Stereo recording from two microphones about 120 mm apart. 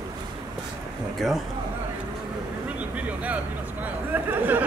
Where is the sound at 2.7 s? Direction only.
10° right (ahead or behind).